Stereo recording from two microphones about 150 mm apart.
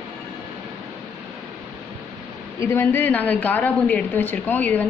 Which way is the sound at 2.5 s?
15° left (ahead or behind).